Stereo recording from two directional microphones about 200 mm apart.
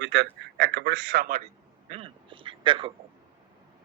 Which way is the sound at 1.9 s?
30° right (ahead or behind).